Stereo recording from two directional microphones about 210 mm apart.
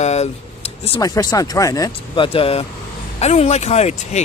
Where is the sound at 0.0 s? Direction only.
30° left (ahead or behind).